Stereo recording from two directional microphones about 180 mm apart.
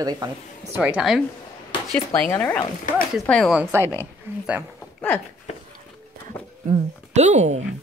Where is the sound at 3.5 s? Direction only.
15° right (ahead or behind).